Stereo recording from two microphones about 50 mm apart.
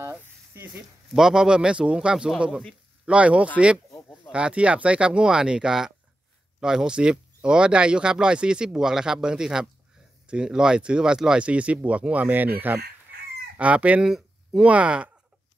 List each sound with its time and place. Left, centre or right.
0.7 s speech: centre
3.1 s speech: right
13.6 s speech: right
14.0 s a sound: centre
14.6 s speech: right